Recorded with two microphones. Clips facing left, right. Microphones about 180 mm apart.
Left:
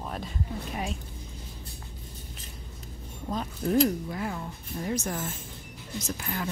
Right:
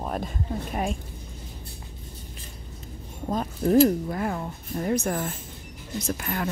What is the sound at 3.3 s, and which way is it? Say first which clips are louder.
A woman's voice: right 5 dB; 45° right (ahead or behind).